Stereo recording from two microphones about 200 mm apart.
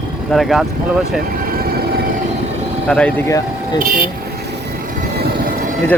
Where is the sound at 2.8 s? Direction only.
5° left (ahead or behind).